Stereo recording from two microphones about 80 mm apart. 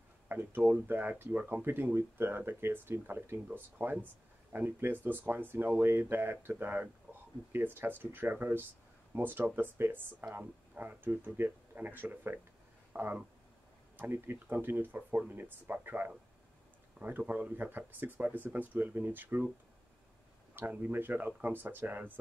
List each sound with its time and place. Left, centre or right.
0.3 s speech: right
17.2 s speech: right
20.5 s speech: right